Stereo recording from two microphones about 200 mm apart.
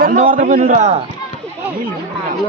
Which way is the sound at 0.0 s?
40° right (ahead or behind).